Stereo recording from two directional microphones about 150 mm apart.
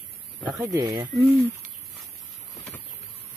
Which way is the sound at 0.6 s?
25° right (ahead or behind).